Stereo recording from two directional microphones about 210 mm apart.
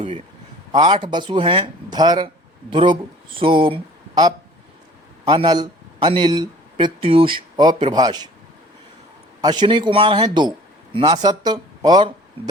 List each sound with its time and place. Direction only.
0.7 s a man's voice: 20° right (ahead or behind)
9.4 s speech: 20° right (ahead or behind)